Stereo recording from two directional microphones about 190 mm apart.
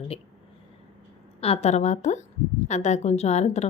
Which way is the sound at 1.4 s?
35° left (ahead or behind).